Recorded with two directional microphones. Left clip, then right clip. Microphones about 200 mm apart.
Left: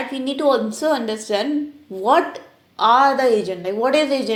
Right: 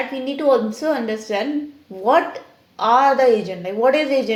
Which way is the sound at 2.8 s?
30° left (ahead or behind).